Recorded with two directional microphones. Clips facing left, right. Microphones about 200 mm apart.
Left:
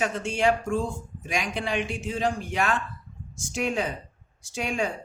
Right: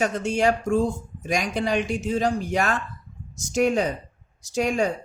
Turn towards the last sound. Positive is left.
turn(degrees=-40)  # may be behind; listen again after turning